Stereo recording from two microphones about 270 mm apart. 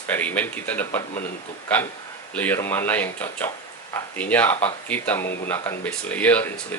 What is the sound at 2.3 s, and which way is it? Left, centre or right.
Speech, centre.